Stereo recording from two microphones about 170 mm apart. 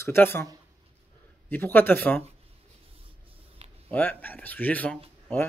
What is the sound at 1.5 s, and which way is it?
Speech, 10° left (ahead or behind).